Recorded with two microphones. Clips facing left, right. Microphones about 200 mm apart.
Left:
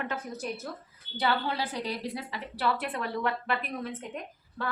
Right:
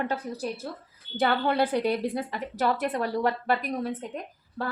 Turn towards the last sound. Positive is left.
turn(degrees=-40)  # may be behind; listen again after turning